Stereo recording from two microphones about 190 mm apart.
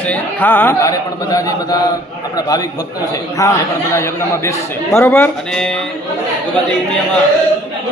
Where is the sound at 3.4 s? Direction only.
15° left (ahead or behind).